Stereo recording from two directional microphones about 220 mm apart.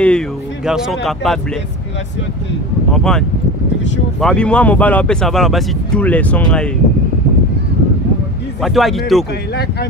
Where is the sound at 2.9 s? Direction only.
5° left (ahead or behind).